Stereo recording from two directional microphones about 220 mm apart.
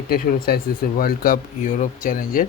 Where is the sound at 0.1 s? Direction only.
45° left (ahead or behind).